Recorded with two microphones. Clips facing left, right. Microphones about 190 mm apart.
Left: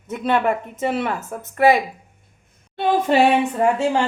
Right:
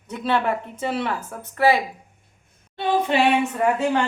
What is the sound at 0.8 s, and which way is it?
Speech, 20° left (ahead or behind).